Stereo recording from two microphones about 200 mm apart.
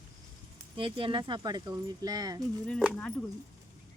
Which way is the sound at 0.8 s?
25° right (ahead or behind).